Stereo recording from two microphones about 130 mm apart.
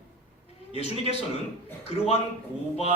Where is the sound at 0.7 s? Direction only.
55° left (ahead or behind).